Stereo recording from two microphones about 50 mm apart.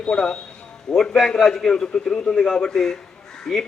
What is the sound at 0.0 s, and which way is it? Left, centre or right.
A man's voice, centre.